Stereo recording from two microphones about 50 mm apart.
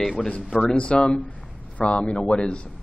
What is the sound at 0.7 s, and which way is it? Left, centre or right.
Speech, left.